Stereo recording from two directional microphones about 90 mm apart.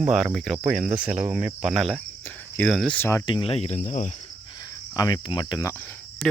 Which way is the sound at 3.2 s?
75° left (ahead or behind).